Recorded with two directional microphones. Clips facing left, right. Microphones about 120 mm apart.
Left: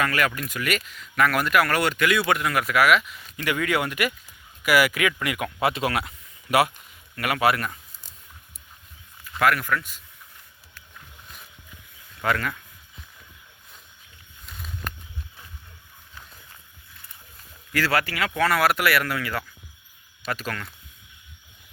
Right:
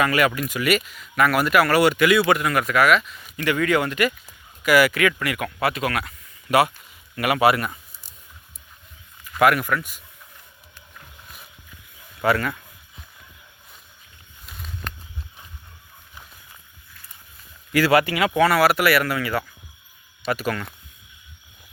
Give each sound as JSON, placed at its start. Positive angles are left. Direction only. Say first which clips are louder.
{"t": 0.0, "sound": "speech", "louder": "right 4 dB", "side_deg": -10}
{"t": 7.2, "sound": "speech", "louder": "right 4 dB", "side_deg": -10}
{"t": 9.4, "sound": "speech", "louder": "right 4 dB", "side_deg": -15}
{"t": 12.2, "sound": "speech", "louder": "right 4 dB", "side_deg": -5}
{"t": 14.4, "sound": "a sound", "louder": "right 1 dB", "side_deg": -5}
{"t": 17.7, "sound": "speech", "louder": "right 7 dB", "side_deg": -10}